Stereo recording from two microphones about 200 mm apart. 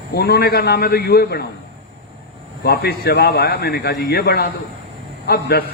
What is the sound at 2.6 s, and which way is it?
A man's voice, 55° left (ahead or behind).